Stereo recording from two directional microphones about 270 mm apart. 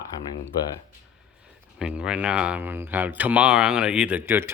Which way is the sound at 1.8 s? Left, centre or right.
Centre.